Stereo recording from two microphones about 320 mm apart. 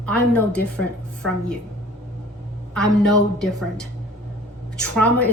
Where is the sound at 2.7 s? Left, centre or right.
Centre.